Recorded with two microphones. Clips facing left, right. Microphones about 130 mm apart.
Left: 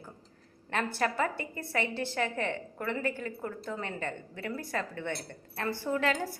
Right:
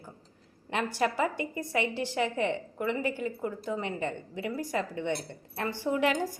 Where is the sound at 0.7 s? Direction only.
15° right (ahead or behind).